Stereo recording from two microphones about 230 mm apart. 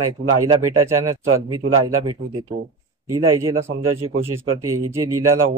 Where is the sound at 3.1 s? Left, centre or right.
Centre.